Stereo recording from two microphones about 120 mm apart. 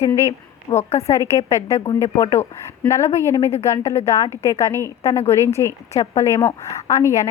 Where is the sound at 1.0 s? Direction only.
25° left (ahead or behind).